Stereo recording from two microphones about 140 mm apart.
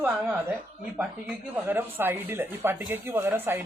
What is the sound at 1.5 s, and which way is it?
Speech, 15° right (ahead or behind).